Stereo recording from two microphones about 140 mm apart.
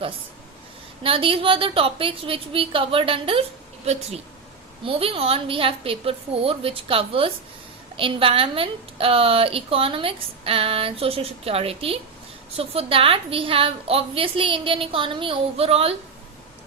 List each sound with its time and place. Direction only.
1.0 s a woman's voice: 40° right (ahead or behind)
4.8 s a woman's voice: 40° right (ahead or behind)